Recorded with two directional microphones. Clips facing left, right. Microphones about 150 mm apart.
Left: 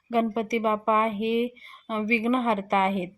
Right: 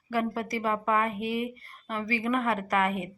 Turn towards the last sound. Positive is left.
turn(degrees=25)  # may be behind; listen again after turning